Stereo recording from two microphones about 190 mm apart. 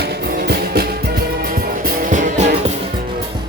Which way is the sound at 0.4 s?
55° right (ahead or behind).